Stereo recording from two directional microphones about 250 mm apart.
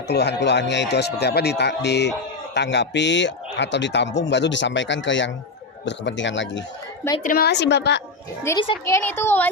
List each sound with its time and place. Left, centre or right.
0.1 s a man's voice: left
8.4 s a child's voice: centre